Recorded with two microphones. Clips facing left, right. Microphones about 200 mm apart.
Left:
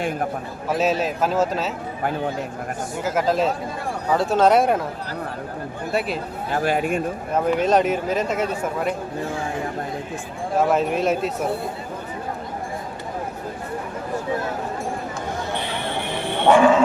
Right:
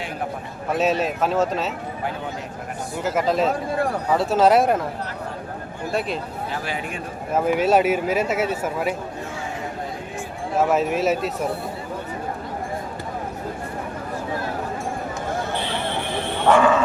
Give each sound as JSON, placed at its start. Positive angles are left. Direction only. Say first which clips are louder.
{"t": 0.7, "sound": "speech", "louder": "even", "side_deg": 0}
{"t": 3.0, "sound": "speech", "louder": "even", "side_deg": 0}
{"t": 5.9, "sound": "speech", "louder": "left 1 dB", "side_deg": 5}
{"t": 6.5, "sound": "speech", "louder": "left 11 dB", "side_deg": 50}
{"t": 7.3, "sound": "speech", "louder": "right 1 dB", "side_deg": -5}
{"t": 10.6, "sound": "speech", "louder": "even", "side_deg": -5}
{"t": 16.5, "sound": "speech", "louder": "left 2 dB", "side_deg": 10}